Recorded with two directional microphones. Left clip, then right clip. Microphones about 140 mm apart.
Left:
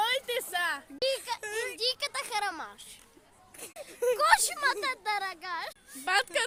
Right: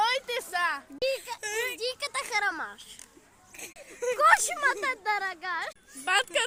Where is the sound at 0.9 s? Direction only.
15° right (ahead or behind).